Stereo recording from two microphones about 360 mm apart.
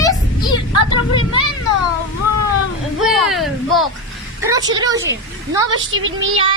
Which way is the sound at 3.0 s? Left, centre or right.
Centre.